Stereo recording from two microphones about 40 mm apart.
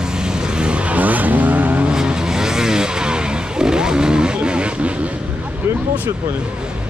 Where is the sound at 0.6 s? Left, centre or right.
Right.